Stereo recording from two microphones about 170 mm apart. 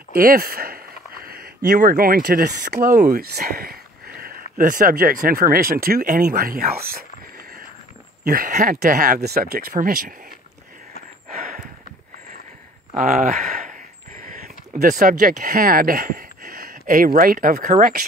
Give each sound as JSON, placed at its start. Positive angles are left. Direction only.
{"t": 0.1, "sound": "speech", "side_deg": -60}
{"t": 3.5, "sound": "speech", "side_deg": -65}
{"t": 8.2, "sound": "speech", "side_deg": -55}
{"t": 11.3, "sound": "a sound", "side_deg": -55}
{"t": 12.9, "sound": "speech", "side_deg": -55}